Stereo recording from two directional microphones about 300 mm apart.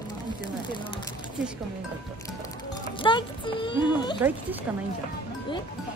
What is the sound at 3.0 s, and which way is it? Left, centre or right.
Speech, centre.